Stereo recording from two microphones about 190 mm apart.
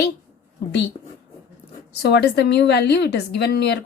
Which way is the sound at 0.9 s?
30° left (ahead or behind).